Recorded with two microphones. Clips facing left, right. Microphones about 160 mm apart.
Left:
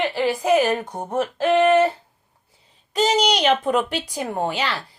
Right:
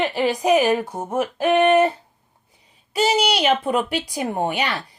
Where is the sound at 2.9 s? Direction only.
10° right (ahead or behind).